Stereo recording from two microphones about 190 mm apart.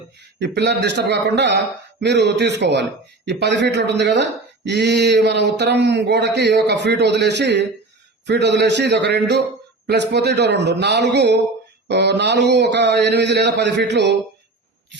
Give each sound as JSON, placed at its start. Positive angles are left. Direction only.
{"t": 0.3, "sound": "speech", "side_deg": -65}